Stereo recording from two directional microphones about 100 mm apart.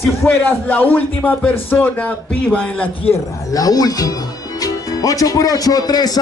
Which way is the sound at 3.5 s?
40° left (ahead or behind).